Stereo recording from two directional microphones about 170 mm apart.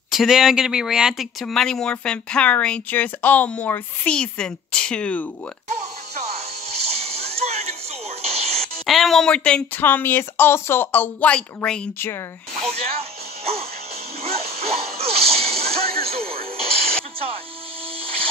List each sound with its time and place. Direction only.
0.1 s speech: centre (ahead or behind)
6.9 s a sound: 35° right (ahead or behind)
8.2 s music: 35° right (ahead or behind)
8.8 s speech: centre (ahead or behind)
12.7 s music: 35° right (ahead or behind)